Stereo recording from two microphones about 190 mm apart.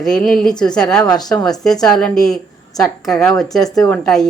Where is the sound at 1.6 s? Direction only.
Centre (ahead or behind).